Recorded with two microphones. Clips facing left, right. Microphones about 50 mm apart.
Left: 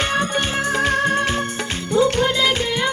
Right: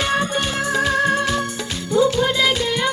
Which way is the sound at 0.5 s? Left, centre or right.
Left.